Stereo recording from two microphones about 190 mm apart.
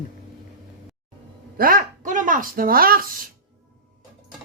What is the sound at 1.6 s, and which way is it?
Speech, 50° right (ahead or behind).